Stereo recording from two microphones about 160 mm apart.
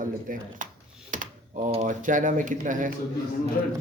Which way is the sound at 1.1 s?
55° right (ahead or behind).